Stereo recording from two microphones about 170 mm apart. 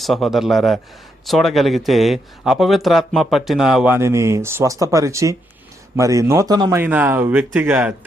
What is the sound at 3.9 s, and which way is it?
Speech, 15° right (ahead or behind).